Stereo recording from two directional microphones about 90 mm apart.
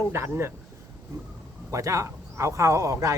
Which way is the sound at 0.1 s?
30° right (ahead or behind).